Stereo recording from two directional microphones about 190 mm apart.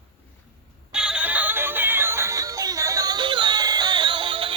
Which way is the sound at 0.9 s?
5° right (ahead or behind).